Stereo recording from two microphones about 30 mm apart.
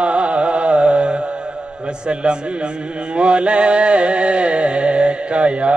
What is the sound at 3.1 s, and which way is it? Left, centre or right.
Mantra, right.